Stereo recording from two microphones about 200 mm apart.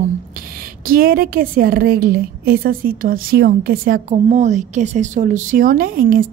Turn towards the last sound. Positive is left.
turn(degrees=-45)  # may be behind; listen again after turning